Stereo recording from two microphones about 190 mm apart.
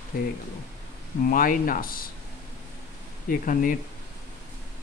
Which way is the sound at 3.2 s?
45° left (ahead or behind).